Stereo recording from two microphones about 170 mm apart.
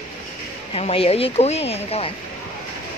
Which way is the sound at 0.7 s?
35° left (ahead or behind).